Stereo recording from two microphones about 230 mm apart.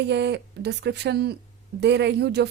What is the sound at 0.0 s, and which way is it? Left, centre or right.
A woman's voice, right.